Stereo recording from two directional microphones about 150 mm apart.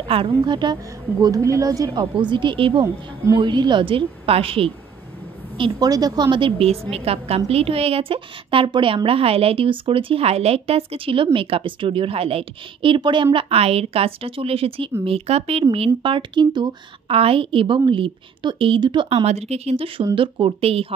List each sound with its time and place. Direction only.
0.4 s a woman's voice: 30° right (ahead or behind)
5.6 s a woman's voice: 25° right (ahead or behind)